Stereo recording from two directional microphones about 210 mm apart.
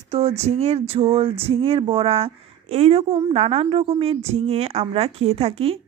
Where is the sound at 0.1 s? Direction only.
30° right (ahead or behind).